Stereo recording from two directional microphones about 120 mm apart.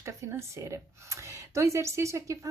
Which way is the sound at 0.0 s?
25° right (ahead or behind).